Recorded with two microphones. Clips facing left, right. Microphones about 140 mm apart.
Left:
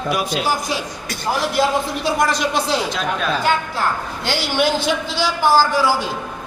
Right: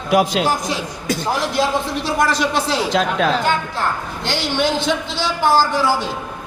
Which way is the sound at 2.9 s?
90° right.